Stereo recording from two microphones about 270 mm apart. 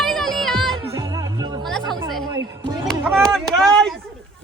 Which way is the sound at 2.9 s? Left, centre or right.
Centre.